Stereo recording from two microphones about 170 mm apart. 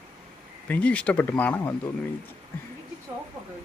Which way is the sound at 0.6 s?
10° left (ahead or behind).